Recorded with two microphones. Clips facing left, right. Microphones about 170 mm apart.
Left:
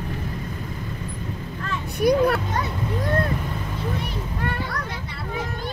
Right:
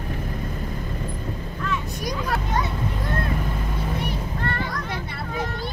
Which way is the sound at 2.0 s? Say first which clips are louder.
Left 13 dB; 60° left (ahead or behind).